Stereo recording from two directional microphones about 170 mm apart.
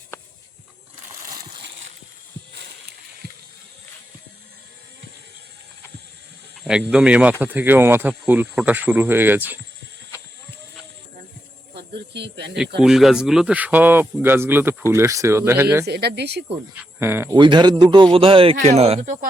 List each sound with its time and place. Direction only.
1.2 s a sound: 60° right (ahead or behind)
6.7 s speech: 5° right (ahead or behind)
12.1 s speech: 85° right
12.8 s speech: centre (ahead or behind)
15.9 s speech: 75° right (ahead or behind)
17.0 s speech: 15° right (ahead or behind)
17.3 s a man's voice: 25° right (ahead or behind); by 19.3 s 45° right (ahead or behind)